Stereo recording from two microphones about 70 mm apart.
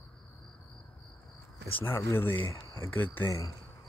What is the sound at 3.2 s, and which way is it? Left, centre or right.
Speech, left.